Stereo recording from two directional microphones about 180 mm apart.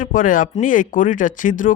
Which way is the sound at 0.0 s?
50° left (ahead or behind).